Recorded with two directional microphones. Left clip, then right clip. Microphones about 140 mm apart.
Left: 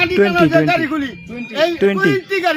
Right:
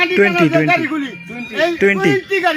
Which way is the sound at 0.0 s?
15° left (ahead or behind).